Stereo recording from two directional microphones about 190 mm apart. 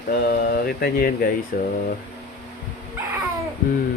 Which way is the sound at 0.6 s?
50° left (ahead or behind).